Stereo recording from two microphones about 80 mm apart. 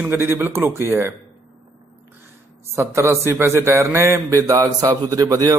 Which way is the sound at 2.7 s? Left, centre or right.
Right.